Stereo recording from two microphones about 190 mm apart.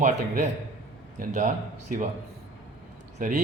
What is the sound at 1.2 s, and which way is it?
Speech, 45° right (ahead or behind).